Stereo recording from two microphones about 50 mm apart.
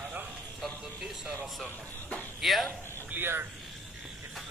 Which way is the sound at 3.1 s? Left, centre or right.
Right.